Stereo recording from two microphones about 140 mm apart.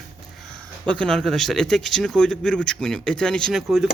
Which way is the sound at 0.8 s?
10° left (ahead or behind).